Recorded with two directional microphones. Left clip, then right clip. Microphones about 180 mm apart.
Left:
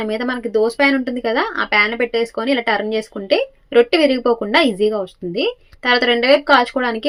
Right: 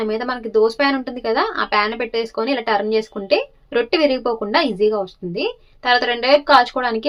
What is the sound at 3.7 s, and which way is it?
Speech, centre (ahead or behind).